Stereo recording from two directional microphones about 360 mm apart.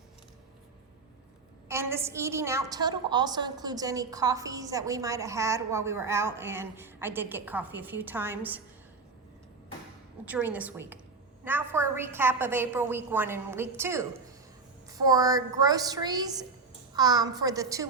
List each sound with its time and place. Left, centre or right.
1.6 s a woman's voice: centre
10.2 s a woman's voice: centre